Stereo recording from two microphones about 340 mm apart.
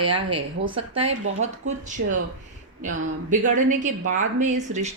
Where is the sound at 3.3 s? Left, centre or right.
Right.